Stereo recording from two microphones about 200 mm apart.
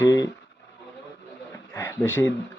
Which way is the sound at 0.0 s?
15° left (ahead or behind).